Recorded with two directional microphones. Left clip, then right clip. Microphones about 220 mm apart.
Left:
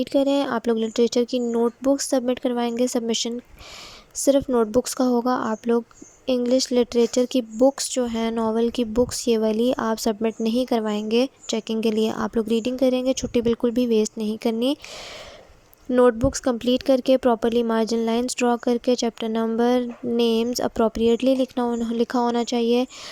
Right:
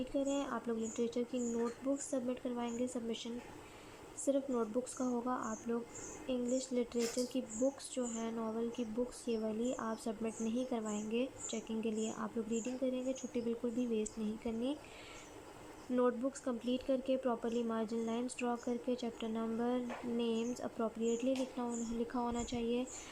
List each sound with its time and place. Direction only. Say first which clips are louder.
0.0 s speech: left 17 dB; 45° left (ahead or behind)
15.9 s speech: left 17 dB; 40° left (ahead or behind)